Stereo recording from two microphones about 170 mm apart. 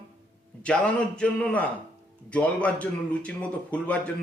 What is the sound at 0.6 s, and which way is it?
Speech, 5° left (ahead or behind).